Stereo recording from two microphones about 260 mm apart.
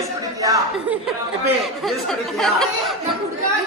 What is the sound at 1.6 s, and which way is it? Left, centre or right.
A woman's voice, centre.